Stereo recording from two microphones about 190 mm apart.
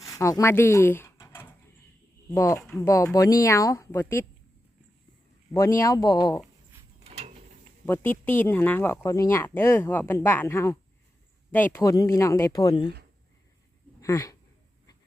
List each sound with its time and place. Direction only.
0.0 s a sound: 15° left (ahead or behind)
2.3 s speech: 15° left (ahead or behind)
2.6 s speech: centre (ahead or behind)
2.8 s speech: 15° left (ahead or behind)
5.8 s speech: 20° left (ahead or behind)
7.0 s mechanisms: 35° right (ahead or behind)
7.9 s speech: 10° left (ahead or behind)
14.0 s speech: 15° left (ahead or behind)